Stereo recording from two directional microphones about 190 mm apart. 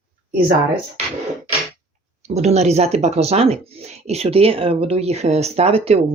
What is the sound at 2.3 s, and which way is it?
Speech, 35° right (ahead or behind).